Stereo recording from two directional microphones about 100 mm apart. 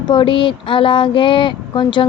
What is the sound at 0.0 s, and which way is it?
Speech, 50° left (ahead or behind).